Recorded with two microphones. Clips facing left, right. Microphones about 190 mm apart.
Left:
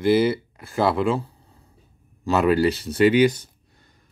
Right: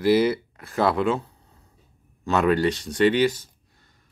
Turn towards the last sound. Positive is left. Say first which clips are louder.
# left 3 dB
turn(degrees=15)  # may be behind; listen again after turning